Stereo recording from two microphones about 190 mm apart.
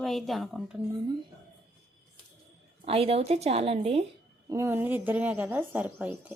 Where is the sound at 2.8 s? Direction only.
30° right (ahead or behind).